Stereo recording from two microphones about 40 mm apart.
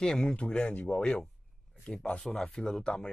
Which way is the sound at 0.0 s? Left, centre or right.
Centre.